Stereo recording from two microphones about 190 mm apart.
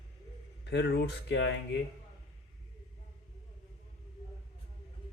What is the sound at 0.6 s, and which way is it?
Speech, 65° left (ahead or behind).